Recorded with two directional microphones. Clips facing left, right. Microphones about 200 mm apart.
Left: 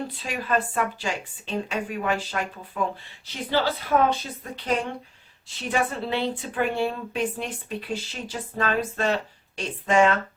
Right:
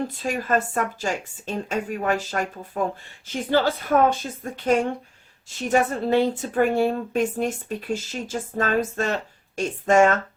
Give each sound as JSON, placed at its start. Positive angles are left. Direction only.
{"t": 0.2, "sound": "a woman's voice", "side_deg": -45}